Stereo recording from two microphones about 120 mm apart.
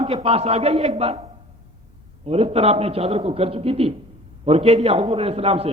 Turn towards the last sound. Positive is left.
turn(degrees=-55)  # may be behind; listen again after turning